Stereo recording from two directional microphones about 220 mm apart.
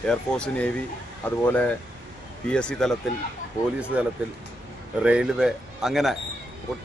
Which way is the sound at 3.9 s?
5° right (ahead or behind).